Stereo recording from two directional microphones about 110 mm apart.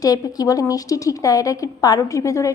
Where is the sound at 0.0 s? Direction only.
35° left (ahead or behind).